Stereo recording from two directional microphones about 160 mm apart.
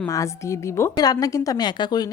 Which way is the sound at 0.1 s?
20° left (ahead or behind).